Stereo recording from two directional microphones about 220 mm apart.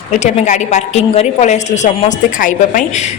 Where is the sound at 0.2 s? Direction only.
30° left (ahead or behind).